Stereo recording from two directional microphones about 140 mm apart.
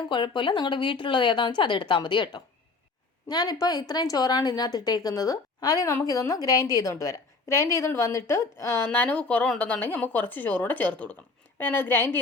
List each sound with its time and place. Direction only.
0.1 s a woman's voice: 35° left (ahead or behind); by 12.2 s 15° left (ahead or behind)